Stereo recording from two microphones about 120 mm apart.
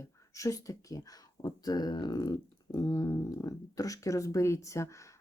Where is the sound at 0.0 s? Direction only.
25° left (ahead or behind).